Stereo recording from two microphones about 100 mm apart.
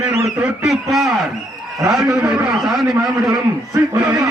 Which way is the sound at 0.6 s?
Centre (ahead or behind).